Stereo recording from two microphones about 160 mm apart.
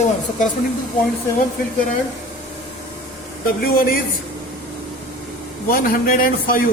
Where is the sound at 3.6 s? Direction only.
70° left (ahead or behind).